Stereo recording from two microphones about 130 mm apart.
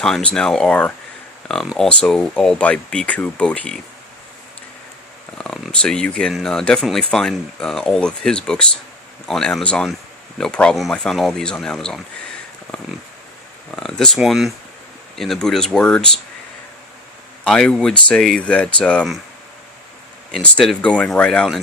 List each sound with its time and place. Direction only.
0.0 s speech: 5° left (ahead or behind)
5.4 s speech: 5° left (ahead or behind)
13.7 s speech: 5° left (ahead or behind)
17.4 s speech: 5° left (ahead or behind)
20.3 s speech: 5° left (ahead or behind)